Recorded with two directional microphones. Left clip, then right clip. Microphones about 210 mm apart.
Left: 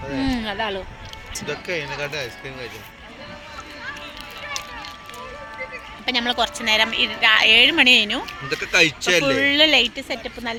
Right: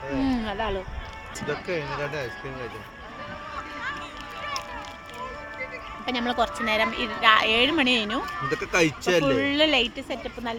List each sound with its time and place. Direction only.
0.2 s a sound: 10° left (ahead or behind)
1.4 s speech: 10° right (ahead or behind)
6.1 s a woman's voice: 5° left (ahead or behind)
8.4 s speech: 50° right (ahead or behind)
9.4 s a woman's voice: 20° left (ahead or behind)